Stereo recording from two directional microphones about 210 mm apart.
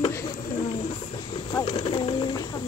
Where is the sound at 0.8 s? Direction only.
20° left (ahead or behind).